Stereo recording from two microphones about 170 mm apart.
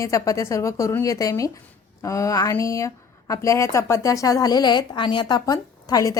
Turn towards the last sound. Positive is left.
turn(degrees=20)  # may be behind; listen again after turning